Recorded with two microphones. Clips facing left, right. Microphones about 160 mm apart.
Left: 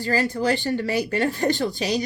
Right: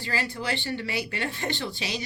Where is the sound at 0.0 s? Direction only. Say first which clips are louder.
Left 9 dB; 45° left (ahead or behind).